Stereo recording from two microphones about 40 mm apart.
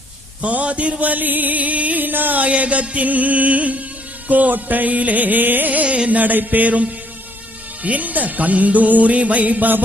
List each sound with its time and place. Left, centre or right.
0.4 s music: right
2.5 s music: right
5.8 s music: right